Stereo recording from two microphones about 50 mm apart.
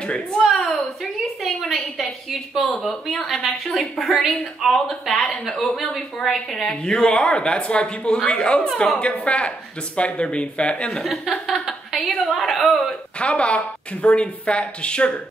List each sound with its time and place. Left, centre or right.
0.0 s speech: centre
1.4 s a woman's voice: centre; by 10.9 s left
11.1 s a woman's voice: centre
13.2 s speech: left